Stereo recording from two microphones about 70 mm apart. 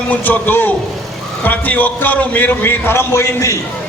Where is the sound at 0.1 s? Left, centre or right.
Left.